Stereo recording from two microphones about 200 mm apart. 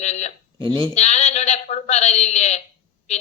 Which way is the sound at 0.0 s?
35° left (ahead or behind).